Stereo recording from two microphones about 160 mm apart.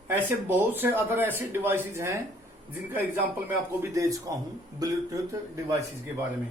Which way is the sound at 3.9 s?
20° right (ahead or behind).